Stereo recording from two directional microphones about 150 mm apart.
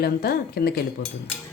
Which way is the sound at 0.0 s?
90° left.